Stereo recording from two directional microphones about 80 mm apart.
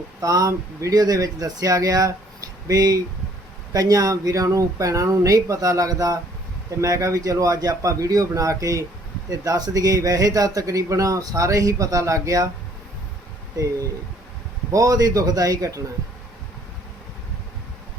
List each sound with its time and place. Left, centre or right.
0.2 s speech: right
13.6 s speech: right